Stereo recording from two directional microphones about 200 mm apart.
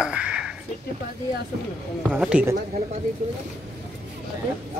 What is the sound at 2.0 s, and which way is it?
Speech, 5° right (ahead or behind).